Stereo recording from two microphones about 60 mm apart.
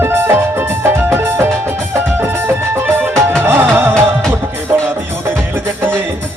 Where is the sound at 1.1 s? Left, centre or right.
Right.